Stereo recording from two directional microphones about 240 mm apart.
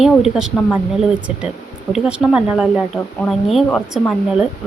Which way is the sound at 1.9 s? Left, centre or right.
Centre.